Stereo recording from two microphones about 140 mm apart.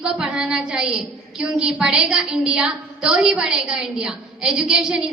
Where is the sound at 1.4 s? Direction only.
5° right (ahead or behind).